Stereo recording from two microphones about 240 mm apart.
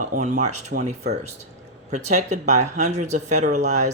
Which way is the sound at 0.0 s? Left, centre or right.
Right.